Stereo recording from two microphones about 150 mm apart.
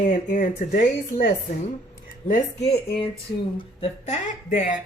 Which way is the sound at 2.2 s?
55° left (ahead or behind).